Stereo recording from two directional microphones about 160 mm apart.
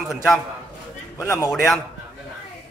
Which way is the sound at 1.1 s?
15° left (ahead or behind).